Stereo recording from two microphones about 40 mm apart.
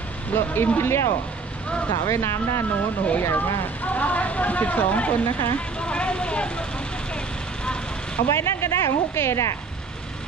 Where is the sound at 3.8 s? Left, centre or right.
Left.